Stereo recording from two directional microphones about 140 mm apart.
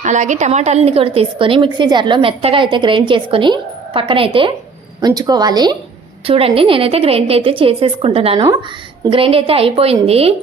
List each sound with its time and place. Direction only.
0.0 s a woman's voice: 60° right (ahead or behind); by 4.5 s 40° right (ahead or behind)
4.9 s a woman's voice: 30° right (ahead or behind)
6.2 s a woman's voice: 40° right (ahead or behind)